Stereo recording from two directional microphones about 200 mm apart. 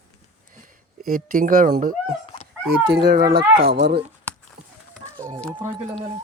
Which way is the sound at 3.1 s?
50° right (ahead or behind).